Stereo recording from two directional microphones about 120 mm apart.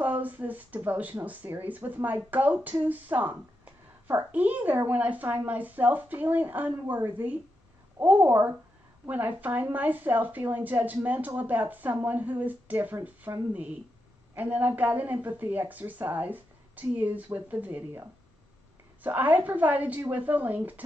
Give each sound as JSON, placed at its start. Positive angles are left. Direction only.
{"t": 0.0, "sound": "a woman's voice", "side_deg": -15}
{"t": 19.0, "sound": "speech", "side_deg": -15}